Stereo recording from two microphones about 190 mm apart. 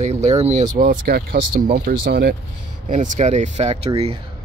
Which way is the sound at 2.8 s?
40° right (ahead or behind).